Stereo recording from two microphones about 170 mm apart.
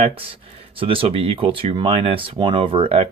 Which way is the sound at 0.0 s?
35° right (ahead or behind).